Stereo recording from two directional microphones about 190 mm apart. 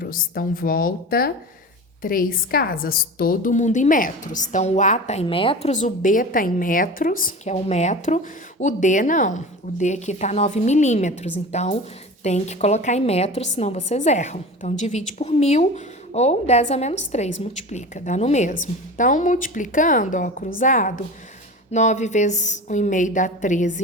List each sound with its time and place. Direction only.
0.0 s a woman's voice: 50° left (ahead or behind)